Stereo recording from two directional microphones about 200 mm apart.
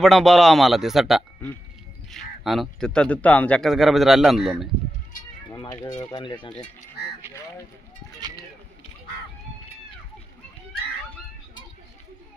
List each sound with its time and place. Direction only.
0.0 s speech: centre (ahead or behind)
6.1 s speech: 25° left (ahead or behind)